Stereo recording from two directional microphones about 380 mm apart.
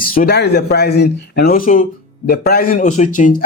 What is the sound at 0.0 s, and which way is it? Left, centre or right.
A man's voice, left.